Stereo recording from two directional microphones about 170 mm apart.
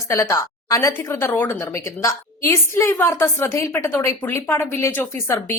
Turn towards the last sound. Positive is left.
turn(degrees=15)  # may be behind; listen again after turning